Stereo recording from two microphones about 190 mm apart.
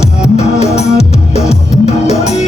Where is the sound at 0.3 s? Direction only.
35° left (ahead or behind).